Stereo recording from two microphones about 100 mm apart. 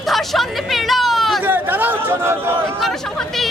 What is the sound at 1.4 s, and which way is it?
Chatter, 20° right (ahead or behind).